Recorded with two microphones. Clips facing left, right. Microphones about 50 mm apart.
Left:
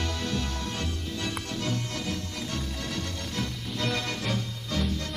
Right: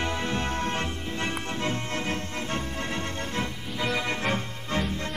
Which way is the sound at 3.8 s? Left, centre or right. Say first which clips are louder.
Right 3 dB; centre.